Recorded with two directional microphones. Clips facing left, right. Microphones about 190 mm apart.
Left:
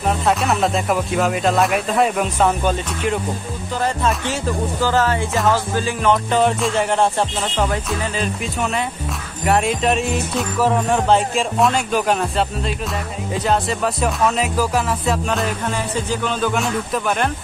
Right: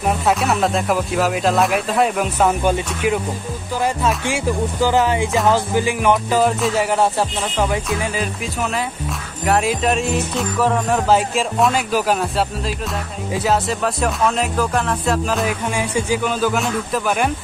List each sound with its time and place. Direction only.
0.0 s music: centre (ahead or behind)
15.6 s music: 10° right (ahead or behind)